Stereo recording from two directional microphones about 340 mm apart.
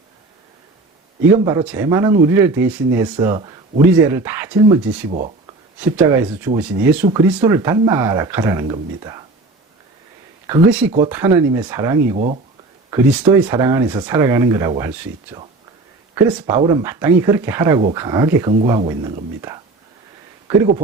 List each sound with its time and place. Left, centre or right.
1.5 s speech: centre
5.1 s a sound: centre
5.8 s speech: centre
10.4 s speech: centre
12.1 s speech: centre
12.9 s speech: centre